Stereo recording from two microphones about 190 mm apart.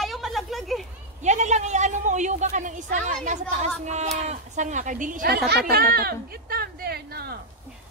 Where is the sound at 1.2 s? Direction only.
40° right (ahead or behind).